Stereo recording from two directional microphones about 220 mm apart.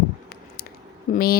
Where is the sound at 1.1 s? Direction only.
45° left (ahead or behind).